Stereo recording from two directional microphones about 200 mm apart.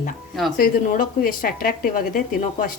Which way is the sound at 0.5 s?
45° left (ahead or behind).